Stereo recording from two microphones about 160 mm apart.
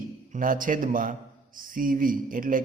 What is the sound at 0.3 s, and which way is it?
A man's voice, 60° right (ahead or behind).